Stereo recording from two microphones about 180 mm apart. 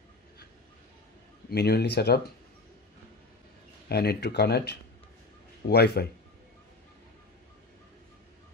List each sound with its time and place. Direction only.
1.5 s speech: 65° left (ahead or behind)
3.9 s speech: 65° left (ahead or behind)